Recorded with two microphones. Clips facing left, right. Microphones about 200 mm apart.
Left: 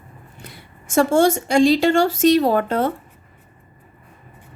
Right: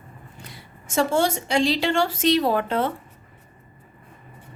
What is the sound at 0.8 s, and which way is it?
A woman's voice, 50° left (ahead or behind).